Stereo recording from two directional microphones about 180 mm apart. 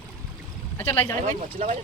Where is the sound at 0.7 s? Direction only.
10° left (ahead or behind).